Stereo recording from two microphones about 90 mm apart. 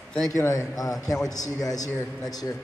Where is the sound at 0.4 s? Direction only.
40° left (ahead or behind).